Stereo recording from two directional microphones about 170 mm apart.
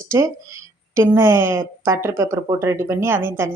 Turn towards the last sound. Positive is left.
turn(degrees=-15)  # may be behind; listen again after turning